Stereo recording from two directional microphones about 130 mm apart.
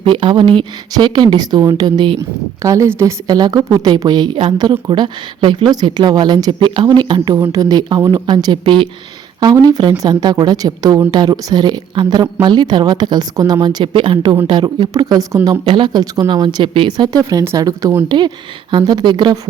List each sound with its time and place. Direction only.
0.0 s a woman's voice: 40° right (ahead or behind)